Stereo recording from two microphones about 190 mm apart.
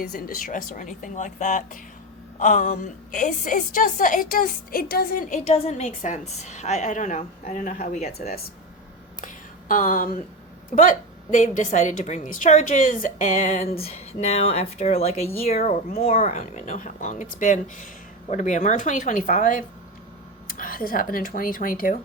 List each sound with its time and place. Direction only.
0.0 s a woman's voice: 50° left (ahead or behind)
5.5 s a woman's voice: 35° left (ahead or behind)
9.2 s a sound: 45° left (ahead or behind)
10.8 s a woman's voice: 45° left (ahead or behind)